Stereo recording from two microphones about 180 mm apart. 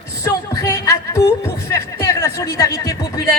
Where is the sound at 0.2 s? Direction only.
20° left (ahead or behind).